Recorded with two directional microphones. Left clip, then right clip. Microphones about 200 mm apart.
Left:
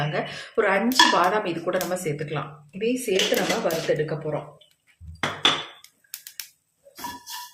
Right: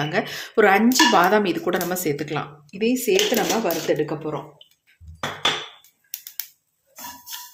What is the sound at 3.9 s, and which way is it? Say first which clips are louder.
Speech: right 2 dB; 45° right (ahead or behind).